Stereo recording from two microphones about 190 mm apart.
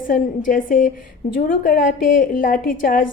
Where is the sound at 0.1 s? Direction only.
45° left (ahead or behind).